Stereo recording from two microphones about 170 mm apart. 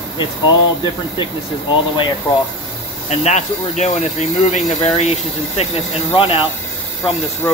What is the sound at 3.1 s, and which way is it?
Speech, 40° left (ahead or behind).